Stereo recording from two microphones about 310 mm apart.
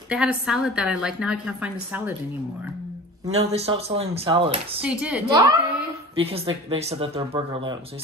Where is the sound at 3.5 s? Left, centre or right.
Centre.